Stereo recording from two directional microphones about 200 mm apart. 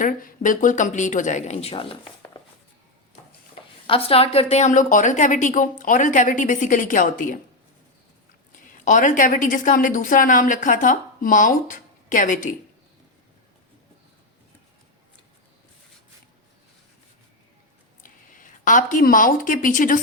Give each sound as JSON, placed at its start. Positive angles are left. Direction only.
{"t": 0.0, "sound": "a woman's voice", "side_deg": 45}
{"t": 3.8, "sound": "a woman's voice", "side_deg": 25}
{"t": 8.7, "sound": "a woman's voice", "side_deg": 40}
{"t": 18.0, "sound": "speech", "side_deg": 40}